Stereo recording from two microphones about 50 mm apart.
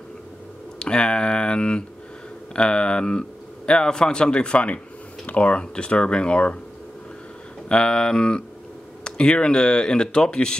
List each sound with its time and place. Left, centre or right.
0.7 s speech: centre
7.6 s speech: centre